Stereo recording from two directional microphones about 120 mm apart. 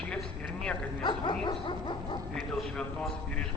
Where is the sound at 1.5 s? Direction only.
40° left (ahead or behind).